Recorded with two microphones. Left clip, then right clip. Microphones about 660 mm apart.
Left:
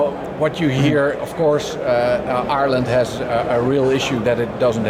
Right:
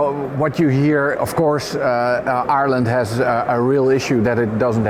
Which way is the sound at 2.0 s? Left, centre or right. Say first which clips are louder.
Right 1 dB; right.